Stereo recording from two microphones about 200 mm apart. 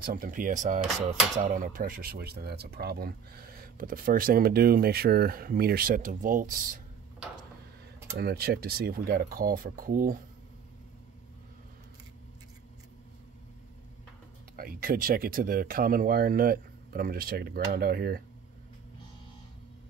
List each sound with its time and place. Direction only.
0.0 s speech: 45° right (ahead or behind)
8.2 s speech: 50° right (ahead or behind)
14.6 s speech: 45° right (ahead or behind)